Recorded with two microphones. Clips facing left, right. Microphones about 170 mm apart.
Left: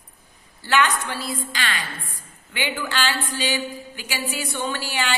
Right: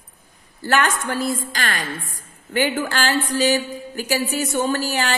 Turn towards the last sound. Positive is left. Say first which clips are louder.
# right 5 dB
turn(degrees=-40)  # may be behind; listen again after turning